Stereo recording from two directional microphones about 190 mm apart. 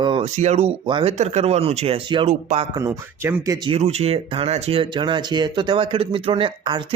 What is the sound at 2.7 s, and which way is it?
Speech, 15° right (ahead or behind).